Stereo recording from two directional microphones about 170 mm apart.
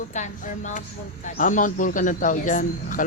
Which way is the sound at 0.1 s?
45° left (ahead or behind).